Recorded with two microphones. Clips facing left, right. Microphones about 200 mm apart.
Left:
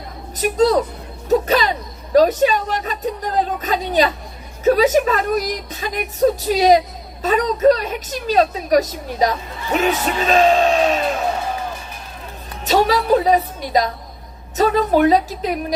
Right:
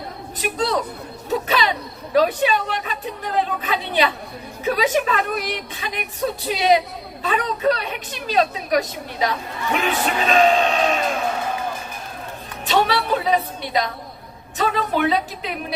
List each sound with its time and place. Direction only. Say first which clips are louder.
0.3 s a woman's voice: left 7 dB; 40° left (ahead or behind)
12.6 s a woman's voice: left 4 dB; 40° left (ahead or behind)